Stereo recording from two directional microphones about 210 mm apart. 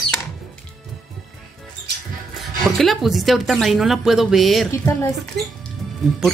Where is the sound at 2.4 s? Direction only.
Centre (ahead or behind).